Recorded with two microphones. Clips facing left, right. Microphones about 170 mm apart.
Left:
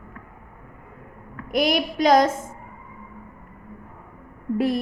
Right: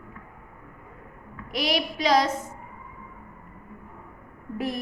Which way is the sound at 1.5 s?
50° left (ahead or behind).